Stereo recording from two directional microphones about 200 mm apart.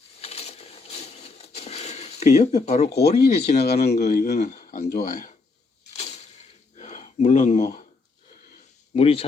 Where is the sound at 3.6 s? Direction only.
55° left (ahead or behind).